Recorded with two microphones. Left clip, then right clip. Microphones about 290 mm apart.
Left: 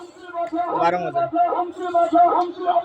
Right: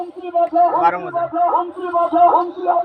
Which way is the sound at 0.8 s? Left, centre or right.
Left.